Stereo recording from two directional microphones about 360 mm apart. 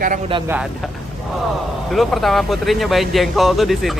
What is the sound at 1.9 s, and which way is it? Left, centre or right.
Speech, centre.